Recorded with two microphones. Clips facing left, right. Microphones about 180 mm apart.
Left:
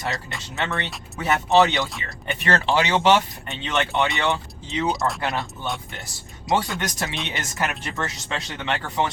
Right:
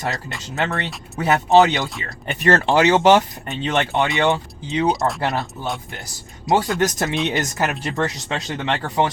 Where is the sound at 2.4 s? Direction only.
45° right (ahead or behind).